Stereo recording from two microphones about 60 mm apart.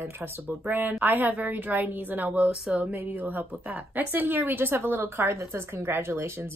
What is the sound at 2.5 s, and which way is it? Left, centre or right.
Speech, centre.